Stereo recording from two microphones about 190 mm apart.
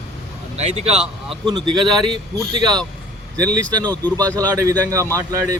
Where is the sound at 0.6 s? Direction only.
35° right (ahead or behind).